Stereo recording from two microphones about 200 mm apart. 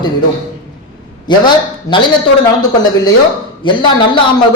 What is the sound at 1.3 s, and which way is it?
Speech, 20° left (ahead or behind).